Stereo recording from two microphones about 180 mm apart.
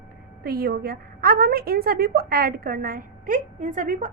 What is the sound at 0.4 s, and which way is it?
A woman's voice, 60° right (ahead or behind).